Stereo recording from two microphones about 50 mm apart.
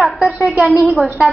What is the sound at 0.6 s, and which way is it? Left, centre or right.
Speech, right.